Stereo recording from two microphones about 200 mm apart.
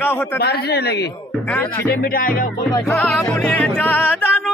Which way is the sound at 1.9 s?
45° left (ahead or behind).